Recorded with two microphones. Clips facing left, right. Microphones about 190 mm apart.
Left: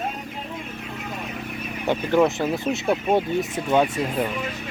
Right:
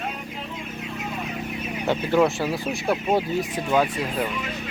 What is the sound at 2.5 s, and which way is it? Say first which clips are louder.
Speech: left 3 dB; 25° left (ahead or behind).